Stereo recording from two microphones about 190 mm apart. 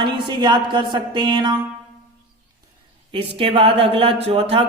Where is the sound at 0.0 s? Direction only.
25° right (ahead or behind).